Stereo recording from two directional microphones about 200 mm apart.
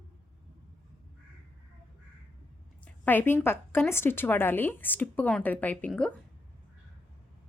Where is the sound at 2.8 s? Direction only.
10° left (ahead or behind).